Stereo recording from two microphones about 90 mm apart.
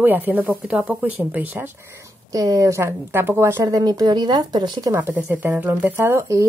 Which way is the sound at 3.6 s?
45° right (ahead or behind).